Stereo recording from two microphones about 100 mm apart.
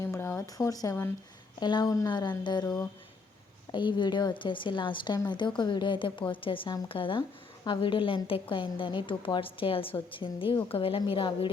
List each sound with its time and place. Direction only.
0.0 s a sound: 25° left (ahead or behind)
0.4 s speech: 35° left (ahead or behind)
1.5 s a woman's voice: 45° left (ahead or behind)
3.7 s a woman's voice: 50° left (ahead or behind)